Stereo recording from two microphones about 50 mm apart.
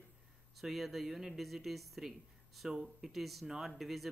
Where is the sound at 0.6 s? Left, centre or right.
Centre.